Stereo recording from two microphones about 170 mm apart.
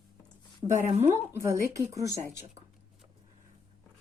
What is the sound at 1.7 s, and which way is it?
Speech, 20° right (ahead or behind).